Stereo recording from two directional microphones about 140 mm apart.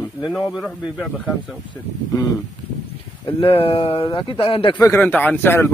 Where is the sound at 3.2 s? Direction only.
40° left (ahead or behind).